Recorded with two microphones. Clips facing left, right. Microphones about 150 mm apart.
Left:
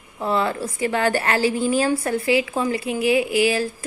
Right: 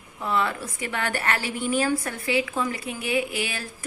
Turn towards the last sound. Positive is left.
turn(degrees=35)  # may be behind; listen again after turning